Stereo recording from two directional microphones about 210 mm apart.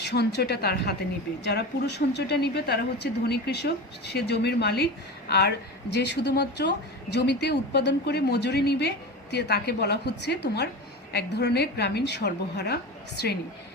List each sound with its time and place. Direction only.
0.0 s a woman's voice: 50° left (ahead or behind)